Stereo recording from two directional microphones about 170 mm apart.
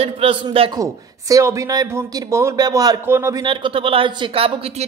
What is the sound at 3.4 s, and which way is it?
A man's voice, 30° right (ahead or behind).